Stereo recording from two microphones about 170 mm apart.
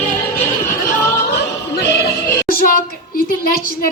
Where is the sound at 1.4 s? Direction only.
80° left.